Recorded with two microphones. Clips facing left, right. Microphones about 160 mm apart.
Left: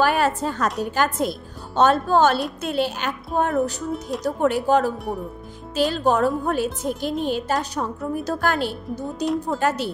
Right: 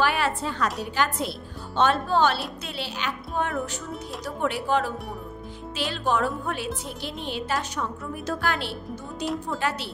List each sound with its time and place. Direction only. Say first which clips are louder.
0.0 s a woman's voice: left 5 dB; 45° left (ahead or behind)